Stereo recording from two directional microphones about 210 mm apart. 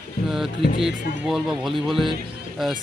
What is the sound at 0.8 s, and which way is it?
Speech, centre (ahead or behind).